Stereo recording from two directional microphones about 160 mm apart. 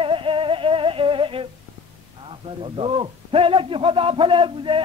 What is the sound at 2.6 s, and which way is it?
A man's voice, 35° right (ahead or behind).